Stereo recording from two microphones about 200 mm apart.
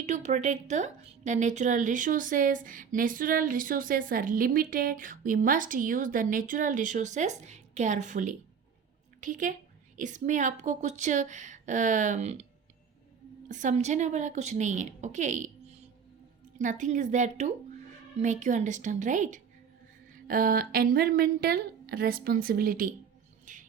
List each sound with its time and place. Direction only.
0.0 s a woman's voice: 35° right (ahead or behind)
13.5 s a woman's voice: 40° right (ahead or behind)
23.5 s music: 40° right (ahead or behind)